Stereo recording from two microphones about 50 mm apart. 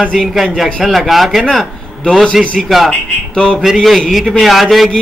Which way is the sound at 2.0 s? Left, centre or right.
Centre.